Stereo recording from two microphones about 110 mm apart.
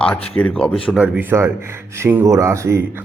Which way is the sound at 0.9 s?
15° right (ahead or behind).